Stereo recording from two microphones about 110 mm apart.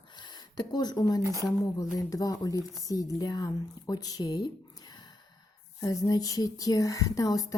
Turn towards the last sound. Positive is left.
turn(degrees=35)  # may be behind; listen again after turning